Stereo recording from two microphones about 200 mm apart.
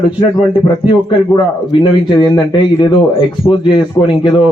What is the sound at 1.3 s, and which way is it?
A man's voice, 25° left (ahead or behind).